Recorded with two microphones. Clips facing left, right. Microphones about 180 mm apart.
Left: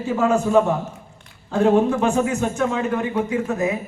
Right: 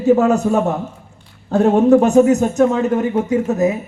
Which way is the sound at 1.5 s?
40° right (ahead or behind).